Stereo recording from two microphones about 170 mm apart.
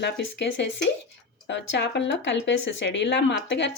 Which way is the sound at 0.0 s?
90° left.